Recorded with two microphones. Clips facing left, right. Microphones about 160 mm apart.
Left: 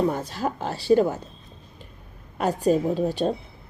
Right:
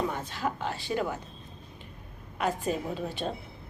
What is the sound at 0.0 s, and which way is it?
A woman's voice, 40° left (ahead or behind).